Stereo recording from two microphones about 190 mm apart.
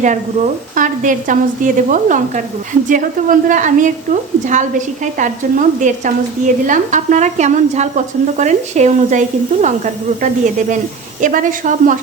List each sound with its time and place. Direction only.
0.0 s a woman's voice: 40° right (ahead or behind)